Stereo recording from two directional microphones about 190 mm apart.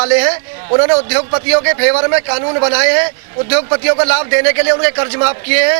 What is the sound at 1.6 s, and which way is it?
A man's voice, 15° right (ahead or behind).